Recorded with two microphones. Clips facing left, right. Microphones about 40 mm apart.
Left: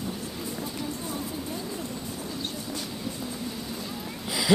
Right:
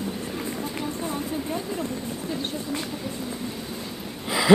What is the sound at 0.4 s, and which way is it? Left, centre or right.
Vehicle, right.